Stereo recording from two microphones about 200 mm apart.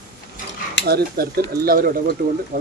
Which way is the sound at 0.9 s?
50° right (ahead or behind).